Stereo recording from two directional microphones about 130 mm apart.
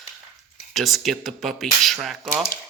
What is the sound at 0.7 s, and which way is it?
Speech, centre (ahead or behind).